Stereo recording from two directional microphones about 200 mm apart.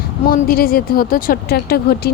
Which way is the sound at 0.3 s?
45° left (ahead or behind).